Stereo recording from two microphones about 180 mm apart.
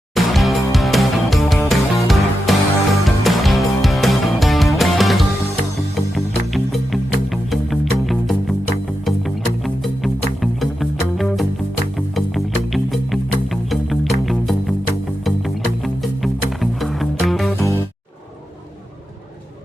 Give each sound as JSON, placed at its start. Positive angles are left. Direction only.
{"t": 0.1, "sound": "music", "side_deg": 0}